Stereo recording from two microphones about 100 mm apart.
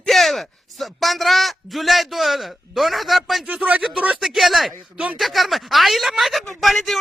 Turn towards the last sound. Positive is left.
turn(degrees=0)  # may be behind; listen again after turning